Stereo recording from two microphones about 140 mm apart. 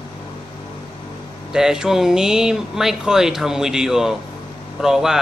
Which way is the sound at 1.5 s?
5° right (ahead or behind).